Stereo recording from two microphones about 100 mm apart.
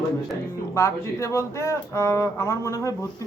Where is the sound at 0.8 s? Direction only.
30° left (ahead or behind).